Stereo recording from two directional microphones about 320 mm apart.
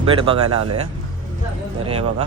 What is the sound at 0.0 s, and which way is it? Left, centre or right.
Speech, centre.